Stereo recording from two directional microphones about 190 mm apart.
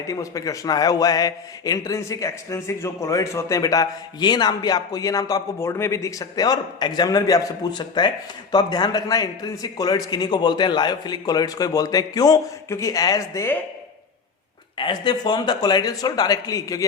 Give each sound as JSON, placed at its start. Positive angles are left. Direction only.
{"t": 0.0, "sound": "a man's voice", "side_deg": 15}
{"t": 14.8, "sound": "a man's voice", "side_deg": 25}